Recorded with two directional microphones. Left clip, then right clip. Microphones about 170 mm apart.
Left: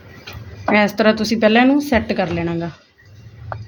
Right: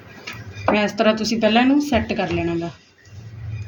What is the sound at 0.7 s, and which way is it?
Speech, 60° left (ahead or behind).